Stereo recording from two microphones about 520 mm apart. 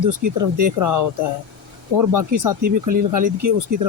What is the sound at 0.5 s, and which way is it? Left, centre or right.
Speech, right.